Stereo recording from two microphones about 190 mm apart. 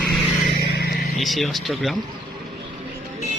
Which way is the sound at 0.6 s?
55° left (ahead or behind).